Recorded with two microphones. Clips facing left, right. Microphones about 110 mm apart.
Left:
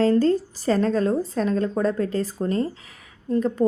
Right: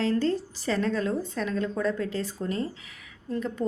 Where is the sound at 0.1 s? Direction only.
40° left (ahead or behind).